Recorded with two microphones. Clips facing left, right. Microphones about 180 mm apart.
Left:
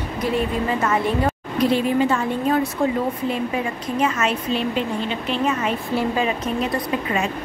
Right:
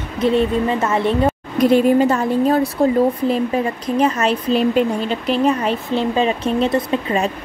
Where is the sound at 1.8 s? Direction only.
40° right (ahead or behind).